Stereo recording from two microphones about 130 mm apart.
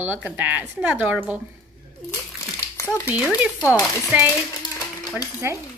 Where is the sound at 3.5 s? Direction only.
25° left (ahead or behind).